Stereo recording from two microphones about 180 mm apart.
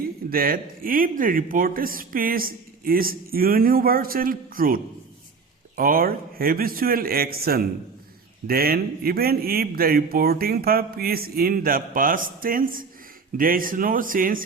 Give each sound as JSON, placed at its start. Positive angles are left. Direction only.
{"t": 0.3, "sound": "speech", "side_deg": -55}